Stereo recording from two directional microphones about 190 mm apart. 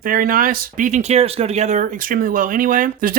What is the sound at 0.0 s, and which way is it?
Speech, 45° right (ahead or behind).